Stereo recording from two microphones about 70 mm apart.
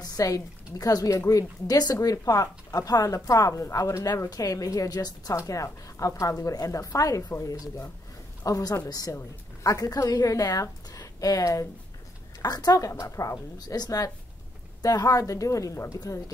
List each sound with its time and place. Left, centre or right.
0.0 s a woman's voice: left
1.7 s speech: left
5.5 s speech: left
8.5 s speech: left
9.1 s a woman's voice: left
12.4 s speech: left
13.0 s speech: left